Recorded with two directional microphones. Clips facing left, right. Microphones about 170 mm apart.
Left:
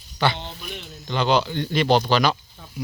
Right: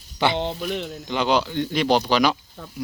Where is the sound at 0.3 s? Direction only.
85° right.